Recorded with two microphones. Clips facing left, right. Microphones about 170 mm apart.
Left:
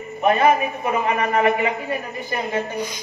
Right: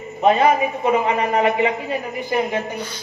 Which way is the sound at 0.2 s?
20° right (ahead or behind).